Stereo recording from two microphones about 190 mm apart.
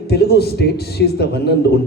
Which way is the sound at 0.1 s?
55° left (ahead or behind).